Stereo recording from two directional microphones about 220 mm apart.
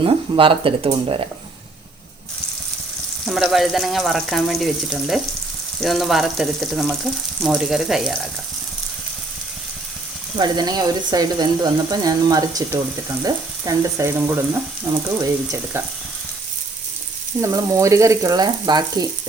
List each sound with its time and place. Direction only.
0.0 s speech: 25° right (ahead or behind)
3.2 s speech: centre (ahead or behind)
10.3 s speech: 20° right (ahead or behind)
17.4 s speech: 15° right (ahead or behind)